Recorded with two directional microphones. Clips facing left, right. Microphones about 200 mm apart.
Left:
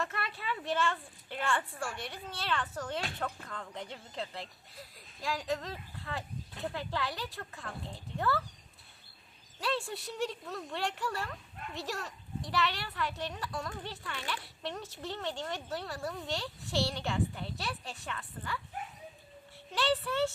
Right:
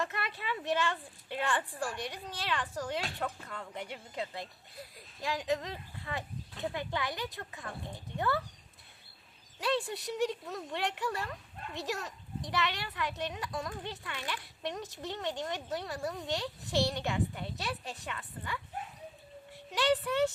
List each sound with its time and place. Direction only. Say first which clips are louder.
0.0 s speech: right 1 dB; 20° right (ahead or behind)
9.6 s speech: right 2 dB; 20° right (ahead or behind)
19.7 s speech: right 2 dB; 15° right (ahead or behind)